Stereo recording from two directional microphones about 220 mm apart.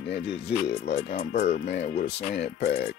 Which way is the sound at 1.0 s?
30° left (ahead or behind).